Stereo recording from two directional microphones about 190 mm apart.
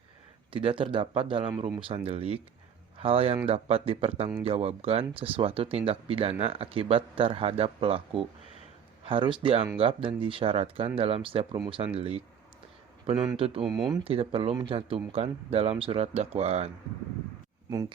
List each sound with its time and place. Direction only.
0.5 s speech: 25° right (ahead or behind)
13.4 s speech: 30° right (ahead or behind)
13.7 s speech: centre (ahead or behind)
13.9 s speech: 30° right (ahead or behind)
17.7 s speech: 20° right (ahead or behind)